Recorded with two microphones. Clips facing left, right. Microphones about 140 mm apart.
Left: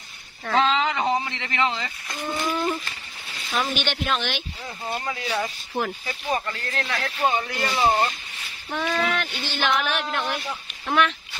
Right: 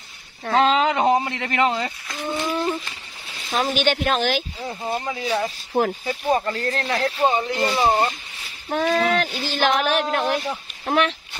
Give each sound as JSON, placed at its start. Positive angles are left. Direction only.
{"t": 0.5, "sound": "speech", "side_deg": -50}
{"t": 2.0, "sound": "speech", "side_deg": 0}
{"t": 3.4, "sound": "speech", "side_deg": -40}
{"t": 4.8, "sound": "speech", "side_deg": -20}
{"t": 6.2, "sound": "speech", "side_deg": -35}
{"t": 7.2, "sound": "speech", "side_deg": -25}
{"t": 8.6, "sound": "speech", "side_deg": -40}